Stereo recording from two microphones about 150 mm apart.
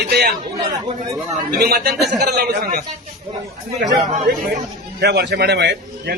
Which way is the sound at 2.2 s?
90° right.